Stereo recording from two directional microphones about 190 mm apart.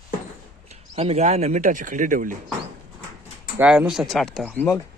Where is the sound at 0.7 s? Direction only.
35° right (ahead or behind).